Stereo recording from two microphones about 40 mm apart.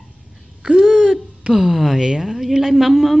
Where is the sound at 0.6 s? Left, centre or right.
Centre.